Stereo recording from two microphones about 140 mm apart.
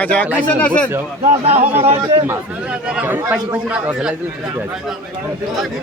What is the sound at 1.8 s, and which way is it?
Speech, 50° right (ahead or behind).